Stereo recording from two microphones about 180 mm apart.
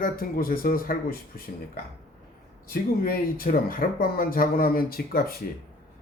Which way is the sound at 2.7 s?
55° left (ahead or behind).